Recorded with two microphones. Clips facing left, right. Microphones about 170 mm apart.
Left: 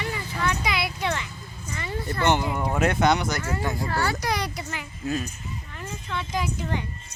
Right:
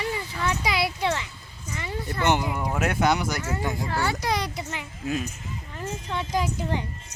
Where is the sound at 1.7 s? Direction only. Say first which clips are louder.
Left 1 dB; 15° right (ahead or behind).